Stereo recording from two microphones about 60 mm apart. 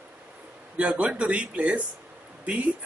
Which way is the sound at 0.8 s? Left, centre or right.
Centre.